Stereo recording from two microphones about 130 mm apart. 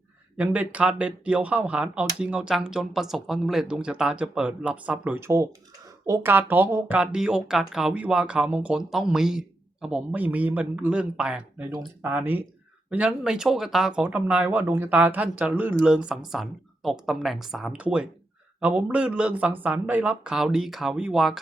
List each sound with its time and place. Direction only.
0.3 s speech: 10° right (ahead or behind)